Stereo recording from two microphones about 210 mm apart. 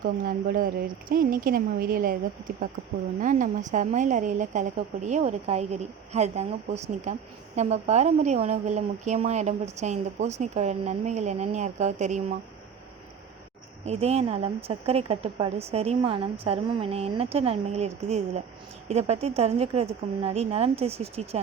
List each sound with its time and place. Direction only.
0.0 s a woman's voice: 40° right (ahead or behind)
3.2 s a woman's voice: 35° right (ahead or behind)
13.8 s a woman's voice: 30° right (ahead or behind)